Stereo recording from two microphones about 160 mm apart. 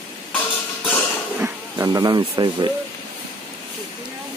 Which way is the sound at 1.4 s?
20° right (ahead or behind).